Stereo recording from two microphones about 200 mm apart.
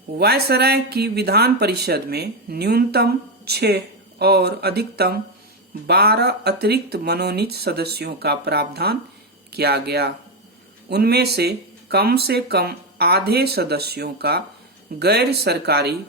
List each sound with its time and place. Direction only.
0.2 s speech: 55° right (ahead or behind)